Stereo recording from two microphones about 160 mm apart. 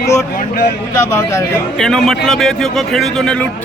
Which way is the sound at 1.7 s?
5° left (ahead or behind).